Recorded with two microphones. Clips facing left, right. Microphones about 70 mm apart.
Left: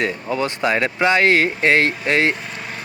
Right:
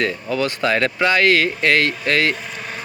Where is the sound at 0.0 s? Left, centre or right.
Left.